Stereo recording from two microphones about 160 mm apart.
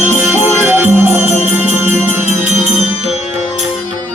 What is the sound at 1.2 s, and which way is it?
Music, 45° right (ahead or behind).